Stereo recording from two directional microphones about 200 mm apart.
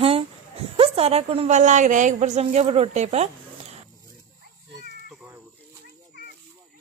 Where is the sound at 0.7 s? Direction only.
30° right (ahead or behind).